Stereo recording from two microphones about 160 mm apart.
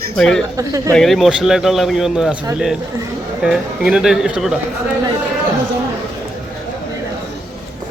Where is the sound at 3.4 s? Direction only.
5° right (ahead or behind).